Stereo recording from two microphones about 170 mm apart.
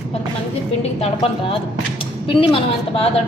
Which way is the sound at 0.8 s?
30° left (ahead or behind).